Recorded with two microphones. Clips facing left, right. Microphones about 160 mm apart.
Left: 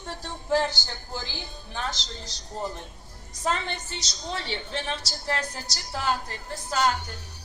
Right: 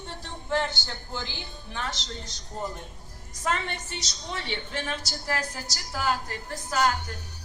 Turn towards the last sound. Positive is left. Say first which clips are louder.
# even
turn(degrees=30)  # may be behind; listen again after turning